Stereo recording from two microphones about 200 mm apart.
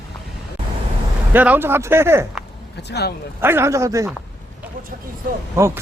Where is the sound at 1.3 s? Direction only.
10° right (ahead or behind).